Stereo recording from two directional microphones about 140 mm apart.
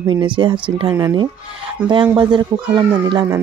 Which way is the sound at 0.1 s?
35° right (ahead or behind).